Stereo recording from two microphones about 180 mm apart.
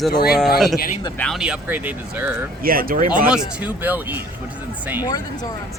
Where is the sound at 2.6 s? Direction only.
55° right (ahead or behind).